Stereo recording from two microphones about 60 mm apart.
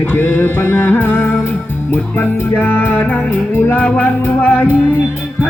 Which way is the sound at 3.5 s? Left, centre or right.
Left.